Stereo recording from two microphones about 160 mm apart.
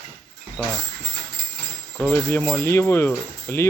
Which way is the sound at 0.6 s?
15° left (ahead or behind).